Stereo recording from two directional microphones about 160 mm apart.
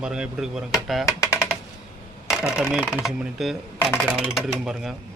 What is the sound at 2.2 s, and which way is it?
Speech, 5° right (ahead or behind).